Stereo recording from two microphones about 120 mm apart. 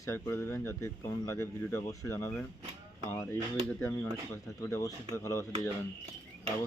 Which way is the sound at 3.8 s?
20° left (ahead or behind).